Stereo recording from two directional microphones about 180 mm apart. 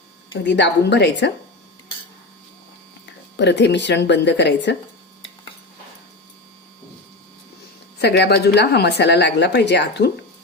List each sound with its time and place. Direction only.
0.4 s a woman's voice: 75° left (ahead or behind)
3.3 s a woman's voice: 75° left (ahead or behind)
7.9 s a woman's voice: 65° left (ahead or behind)